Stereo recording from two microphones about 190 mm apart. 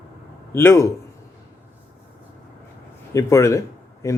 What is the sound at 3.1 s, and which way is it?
Speech, 15° left (ahead or behind).